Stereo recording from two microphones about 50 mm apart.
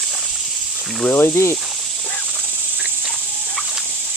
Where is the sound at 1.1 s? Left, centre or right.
Left.